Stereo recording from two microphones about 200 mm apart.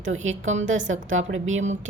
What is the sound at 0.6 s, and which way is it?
Speech, 75° right (ahead or behind).